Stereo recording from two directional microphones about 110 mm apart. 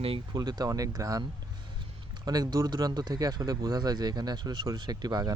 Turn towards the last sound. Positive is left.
turn(degrees=-35)  # may be behind; listen again after turning